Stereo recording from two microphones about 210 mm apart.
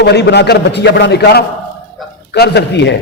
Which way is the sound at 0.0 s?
55° left (ahead or behind).